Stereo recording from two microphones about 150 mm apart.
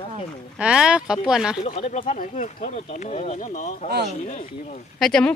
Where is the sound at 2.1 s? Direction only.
55° left (ahead or behind).